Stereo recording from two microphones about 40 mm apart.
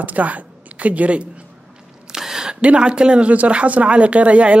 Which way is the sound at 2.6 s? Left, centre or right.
Right.